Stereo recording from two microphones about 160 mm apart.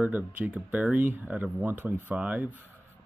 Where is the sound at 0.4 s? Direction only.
10° right (ahead or behind).